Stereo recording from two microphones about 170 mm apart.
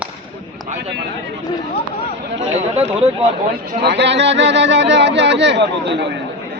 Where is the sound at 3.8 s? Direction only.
90° right.